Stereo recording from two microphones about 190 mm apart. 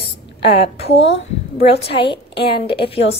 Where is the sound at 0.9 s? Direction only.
70° left (ahead or behind).